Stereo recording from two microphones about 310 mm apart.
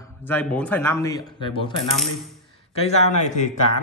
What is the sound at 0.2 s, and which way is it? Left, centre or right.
Speech, centre.